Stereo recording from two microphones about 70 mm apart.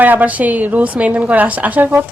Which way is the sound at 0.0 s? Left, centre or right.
Right.